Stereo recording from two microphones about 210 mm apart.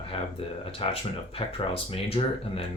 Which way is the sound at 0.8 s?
25° left (ahead or behind).